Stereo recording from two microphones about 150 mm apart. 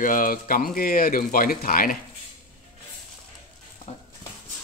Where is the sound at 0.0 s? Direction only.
65° left (ahead or behind).